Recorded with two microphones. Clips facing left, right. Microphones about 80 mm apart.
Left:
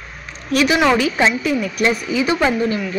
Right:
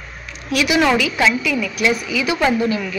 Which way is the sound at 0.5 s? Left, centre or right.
Left.